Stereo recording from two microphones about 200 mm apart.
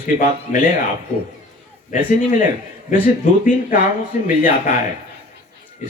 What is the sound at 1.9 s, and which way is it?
Speech, 40° left (ahead or behind).